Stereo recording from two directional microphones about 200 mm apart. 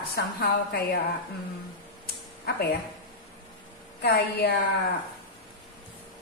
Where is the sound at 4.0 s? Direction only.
55° left (ahead or behind).